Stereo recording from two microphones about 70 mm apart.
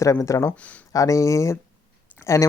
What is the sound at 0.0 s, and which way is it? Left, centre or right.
Speech, left.